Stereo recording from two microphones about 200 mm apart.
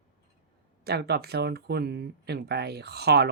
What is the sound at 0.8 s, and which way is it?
Speech, 55° right (ahead or behind).